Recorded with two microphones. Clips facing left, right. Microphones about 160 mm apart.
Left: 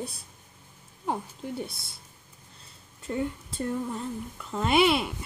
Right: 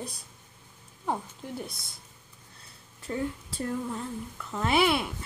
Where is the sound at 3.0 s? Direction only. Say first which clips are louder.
Left 1 dB; centre (ahead or behind).